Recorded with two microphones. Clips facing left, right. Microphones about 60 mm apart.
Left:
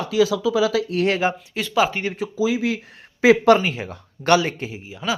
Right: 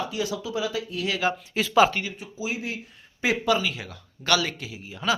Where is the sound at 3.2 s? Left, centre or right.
Left.